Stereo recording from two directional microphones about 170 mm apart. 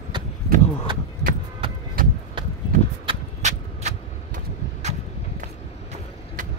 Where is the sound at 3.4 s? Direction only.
40° right (ahead or behind).